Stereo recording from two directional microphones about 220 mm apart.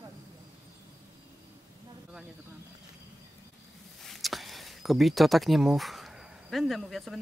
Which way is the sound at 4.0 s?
Centre (ahead or behind).